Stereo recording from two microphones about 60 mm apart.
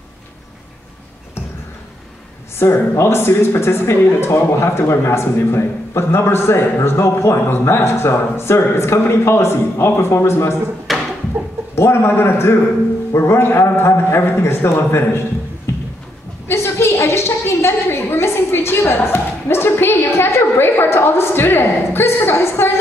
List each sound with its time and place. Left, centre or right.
2.6 s speech: left
10.9 s a sound: centre
11.7 s a woman's voice: left